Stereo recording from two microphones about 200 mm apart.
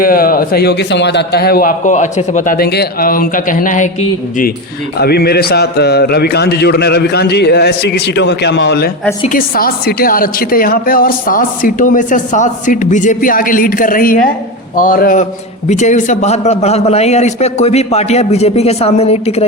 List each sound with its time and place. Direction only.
0.0 s a woman's voice: 45° left (ahead or behind)
4.9 s a man's voice: 50° left (ahead or behind)
9.2 s a woman's voice: 45° left (ahead or behind)